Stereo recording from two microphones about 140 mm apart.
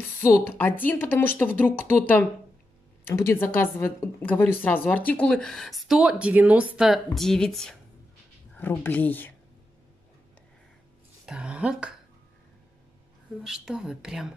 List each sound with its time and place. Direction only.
0.2 s a woman's voice: 15° left (ahead or behind)
11.2 s speech: 5° right (ahead or behind)
13.4 s a woman's voice: 5° right (ahead or behind)